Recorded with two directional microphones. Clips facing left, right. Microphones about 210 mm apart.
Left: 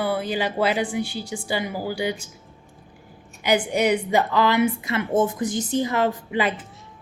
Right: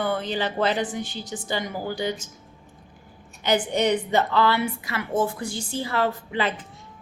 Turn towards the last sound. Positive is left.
turn(degrees=15)  # may be behind; listen again after turning